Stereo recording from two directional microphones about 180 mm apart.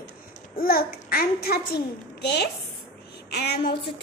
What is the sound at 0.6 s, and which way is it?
A child's voice, 55° left (ahead or behind).